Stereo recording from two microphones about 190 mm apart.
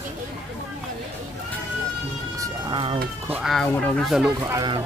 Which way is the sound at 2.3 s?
15° right (ahead or behind).